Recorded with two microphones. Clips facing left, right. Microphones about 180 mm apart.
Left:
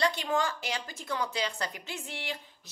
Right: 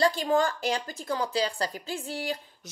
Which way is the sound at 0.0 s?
35° right (ahead or behind).